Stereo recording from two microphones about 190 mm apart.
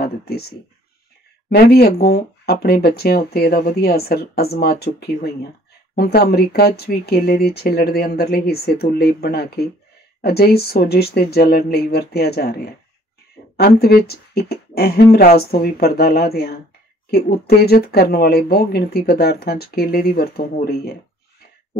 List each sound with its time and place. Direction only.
0.0 s speech: 55° left (ahead or behind)